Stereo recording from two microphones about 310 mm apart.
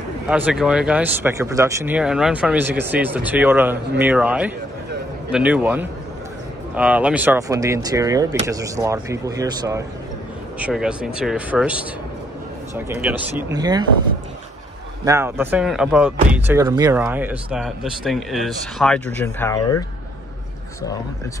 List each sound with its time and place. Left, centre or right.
0.3 s speech: centre
15.0 s speech: centre